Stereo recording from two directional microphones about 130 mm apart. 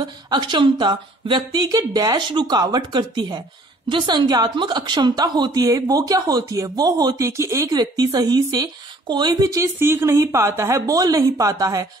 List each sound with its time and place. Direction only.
0.0 s a woman's voice: 35° right (ahead or behind)